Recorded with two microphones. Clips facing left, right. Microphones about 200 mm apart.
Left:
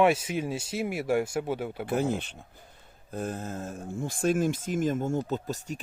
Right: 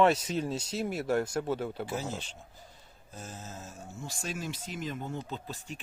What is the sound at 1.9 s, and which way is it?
Speech, 55° left (ahead or behind).